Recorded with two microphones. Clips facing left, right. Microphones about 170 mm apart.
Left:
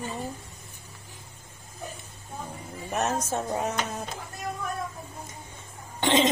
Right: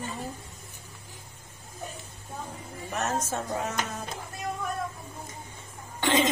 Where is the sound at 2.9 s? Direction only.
15° left (ahead or behind).